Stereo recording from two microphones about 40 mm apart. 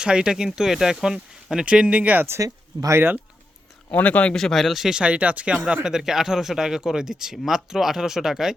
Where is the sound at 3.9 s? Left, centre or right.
Left.